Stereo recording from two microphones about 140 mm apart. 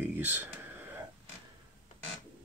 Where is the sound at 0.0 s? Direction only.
15° right (ahead or behind).